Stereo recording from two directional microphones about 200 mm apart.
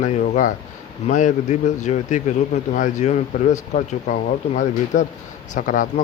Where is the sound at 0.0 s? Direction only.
40° left (ahead or behind).